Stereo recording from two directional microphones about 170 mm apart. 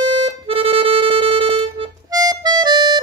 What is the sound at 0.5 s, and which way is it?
Music, 35° right (ahead or behind).